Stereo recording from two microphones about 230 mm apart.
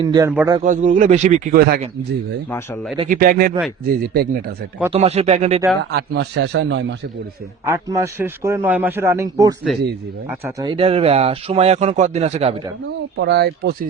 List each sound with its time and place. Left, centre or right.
0.0 s speech: centre
0.6 s speech: right
2.5 s speech: centre
3.1 s speech: right
4.9 s a man's voice: right
5.9 s a man's voice: right
7.7 s speech: centre
10.7 s a man's voice: right
13.1 s a man's voice: right